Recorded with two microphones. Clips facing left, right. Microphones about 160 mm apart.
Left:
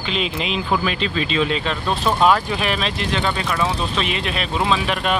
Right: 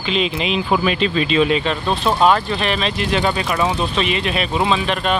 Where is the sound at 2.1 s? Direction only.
5° right (ahead or behind).